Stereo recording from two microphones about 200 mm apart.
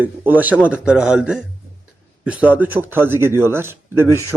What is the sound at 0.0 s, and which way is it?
A man's voice, 10° right (ahead or behind).